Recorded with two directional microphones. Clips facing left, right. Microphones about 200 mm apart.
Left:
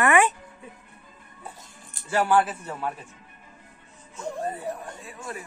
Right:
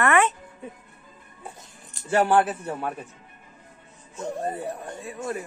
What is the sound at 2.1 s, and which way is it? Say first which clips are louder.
Speech: right 2 dB; 25° right (ahead or behind).